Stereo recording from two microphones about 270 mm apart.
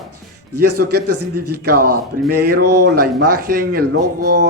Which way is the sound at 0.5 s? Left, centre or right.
Right.